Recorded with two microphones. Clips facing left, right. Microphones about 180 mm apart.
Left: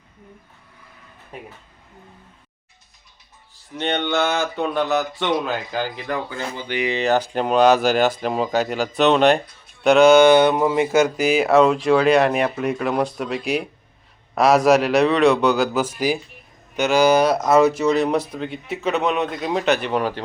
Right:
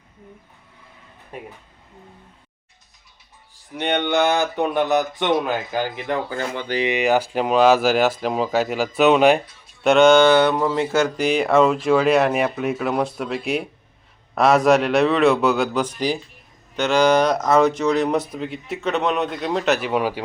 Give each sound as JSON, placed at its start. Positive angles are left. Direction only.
{"t": 3.8, "sound": "speech", "side_deg": -15}
{"t": 10.2, "sound": "speech", "side_deg": 15}